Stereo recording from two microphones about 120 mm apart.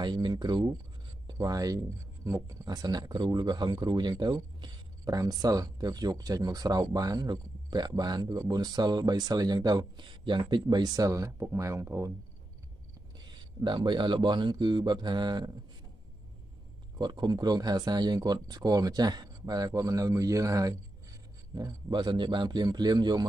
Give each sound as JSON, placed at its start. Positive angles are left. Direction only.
{"t": 0.0, "sound": "speech", "side_deg": -40}
{"t": 13.6, "sound": "speech", "side_deg": -40}
{"t": 17.0, "sound": "speech", "side_deg": -40}